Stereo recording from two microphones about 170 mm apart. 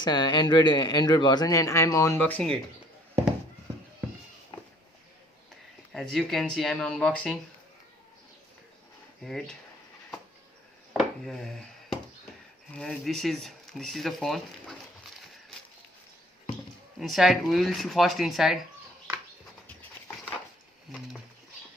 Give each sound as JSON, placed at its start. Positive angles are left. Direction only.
{"t": 0.0, "sound": "speech", "side_deg": 25}
{"t": 5.9, "sound": "speech", "side_deg": 0}
{"t": 9.2, "sound": "speech", "side_deg": 5}
{"t": 10.9, "sound": "a sound", "side_deg": 0}
{"t": 12.7, "sound": "speech", "side_deg": 5}
{"t": 17.0, "sound": "speech", "side_deg": 0}